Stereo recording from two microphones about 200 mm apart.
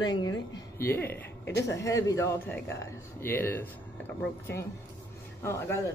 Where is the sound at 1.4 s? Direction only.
60° left (ahead or behind).